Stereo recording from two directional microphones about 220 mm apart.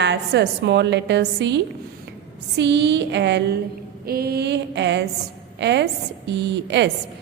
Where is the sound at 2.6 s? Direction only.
50° right (ahead or behind).